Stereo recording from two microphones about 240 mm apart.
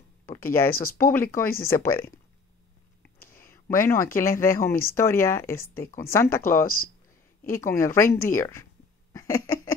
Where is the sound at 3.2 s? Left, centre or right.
Left.